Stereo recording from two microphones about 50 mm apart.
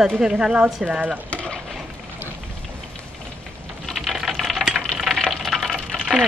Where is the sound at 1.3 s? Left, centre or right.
Left.